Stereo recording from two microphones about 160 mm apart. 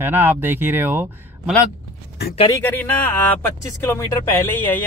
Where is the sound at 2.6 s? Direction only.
15° left (ahead or behind).